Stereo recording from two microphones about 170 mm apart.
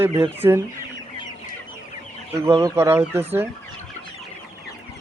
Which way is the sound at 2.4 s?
15° right (ahead or behind).